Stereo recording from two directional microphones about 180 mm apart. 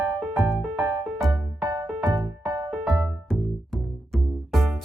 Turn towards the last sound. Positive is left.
turn(degrees=0)  # may be behind; listen again after turning